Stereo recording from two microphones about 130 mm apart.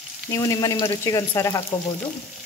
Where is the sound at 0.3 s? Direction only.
25° left (ahead or behind).